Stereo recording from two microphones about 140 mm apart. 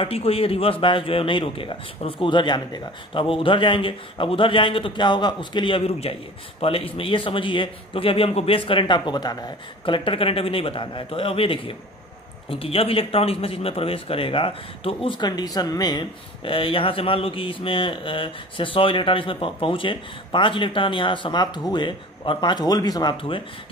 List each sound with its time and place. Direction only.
0.0 s a man's voice: 45° left (ahead or behind)